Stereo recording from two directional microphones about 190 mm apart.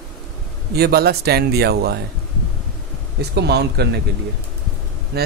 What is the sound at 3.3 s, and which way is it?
Speech, 60° right (ahead or behind).